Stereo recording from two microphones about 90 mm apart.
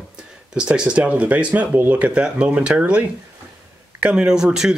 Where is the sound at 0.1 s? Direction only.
10° right (ahead or behind).